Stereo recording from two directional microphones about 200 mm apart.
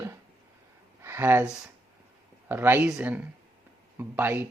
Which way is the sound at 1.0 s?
10° right (ahead or behind).